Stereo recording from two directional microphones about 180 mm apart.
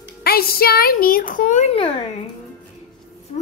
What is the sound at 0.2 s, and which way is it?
A child's voice, 55° left (ahead or behind).